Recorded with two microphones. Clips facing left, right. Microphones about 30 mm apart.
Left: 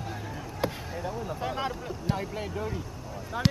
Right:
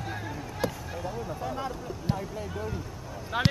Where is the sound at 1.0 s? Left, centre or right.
Left.